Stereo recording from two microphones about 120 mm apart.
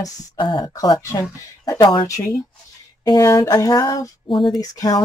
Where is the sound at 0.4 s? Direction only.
40° left (ahead or behind).